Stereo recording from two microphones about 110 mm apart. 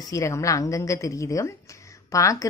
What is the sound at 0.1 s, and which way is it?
A woman's voice, 30° left (ahead or behind).